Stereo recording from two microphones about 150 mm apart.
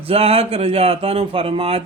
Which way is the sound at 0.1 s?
40° right (ahead or behind).